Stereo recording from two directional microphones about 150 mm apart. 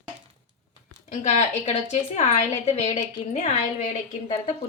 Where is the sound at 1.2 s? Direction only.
45° left (ahead or behind).